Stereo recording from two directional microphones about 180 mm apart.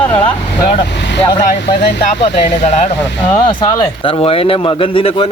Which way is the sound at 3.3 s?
25° left (ahead or behind).